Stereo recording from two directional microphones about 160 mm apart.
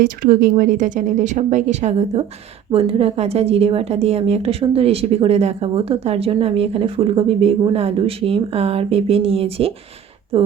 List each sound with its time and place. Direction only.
0.0 s a woman's voice: 60° right (ahead or behind); by 10.5 s 35° right (ahead or behind)